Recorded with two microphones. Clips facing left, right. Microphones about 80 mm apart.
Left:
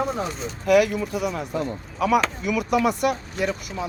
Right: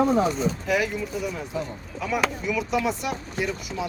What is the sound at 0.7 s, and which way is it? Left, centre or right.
A man's voice, left.